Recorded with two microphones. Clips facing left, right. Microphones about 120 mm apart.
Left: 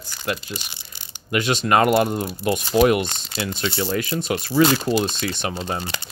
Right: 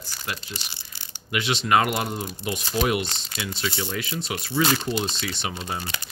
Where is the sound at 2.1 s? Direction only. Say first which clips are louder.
Left 7 dB; 60° left (ahead or behind).